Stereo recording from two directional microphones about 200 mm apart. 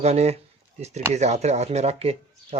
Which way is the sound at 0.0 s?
35° right (ahead or behind).